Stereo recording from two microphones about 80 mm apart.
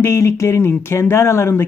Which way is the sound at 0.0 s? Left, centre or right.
Left.